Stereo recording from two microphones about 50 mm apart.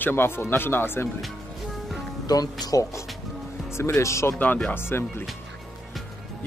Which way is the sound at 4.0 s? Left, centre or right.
Left.